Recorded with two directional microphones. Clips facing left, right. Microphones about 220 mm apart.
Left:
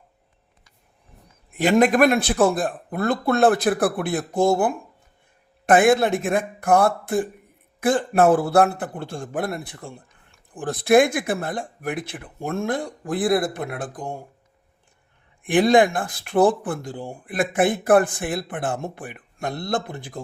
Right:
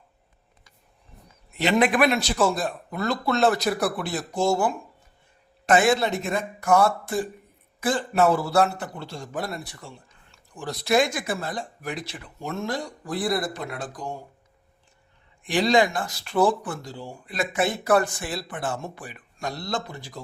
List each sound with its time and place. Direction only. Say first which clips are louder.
1.5 s speech: left 4 dB; 50° left (ahead or behind)
15.4 s speech: left 5 dB; 55° left (ahead or behind)